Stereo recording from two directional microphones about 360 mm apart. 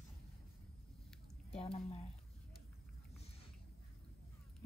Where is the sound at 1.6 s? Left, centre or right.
Centre.